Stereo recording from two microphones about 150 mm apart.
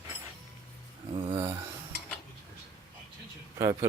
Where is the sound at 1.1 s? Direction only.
40° right (ahead or behind).